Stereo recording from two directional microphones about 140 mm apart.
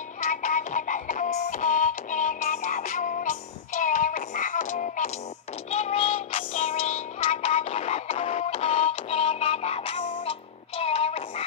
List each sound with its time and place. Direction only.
0.2 s music: 65° left (ahead or behind)
5.7 s child singing: 50° left (ahead or behind)
6.8 s music: 60° left (ahead or behind)
7.4 s music: 50° left (ahead or behind)